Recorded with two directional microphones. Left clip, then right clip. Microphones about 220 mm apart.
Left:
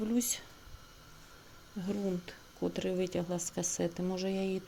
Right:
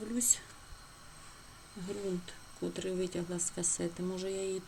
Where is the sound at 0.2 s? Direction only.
30° left (ahead or behind).